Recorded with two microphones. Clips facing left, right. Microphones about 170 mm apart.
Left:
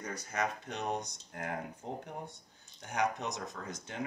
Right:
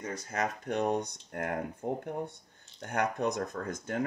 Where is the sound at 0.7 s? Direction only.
55° right (ahead or behind).